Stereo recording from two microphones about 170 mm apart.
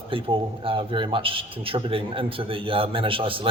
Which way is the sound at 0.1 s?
30° right (ahead or behind).